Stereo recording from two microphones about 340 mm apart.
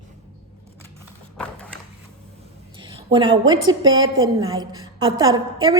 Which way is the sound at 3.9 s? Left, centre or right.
Right.